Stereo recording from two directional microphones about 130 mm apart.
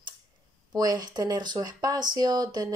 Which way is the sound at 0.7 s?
30° right (ahead or behind).